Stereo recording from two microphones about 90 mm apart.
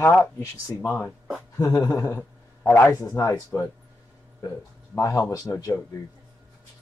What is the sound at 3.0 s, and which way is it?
Speech, 40° left (ahead or behind).